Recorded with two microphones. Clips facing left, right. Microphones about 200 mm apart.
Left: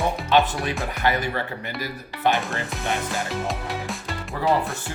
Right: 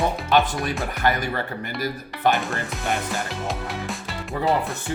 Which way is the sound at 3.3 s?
Centre (ahead or behind).